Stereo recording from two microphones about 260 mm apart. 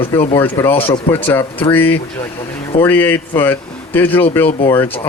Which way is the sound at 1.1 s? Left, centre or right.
Centre.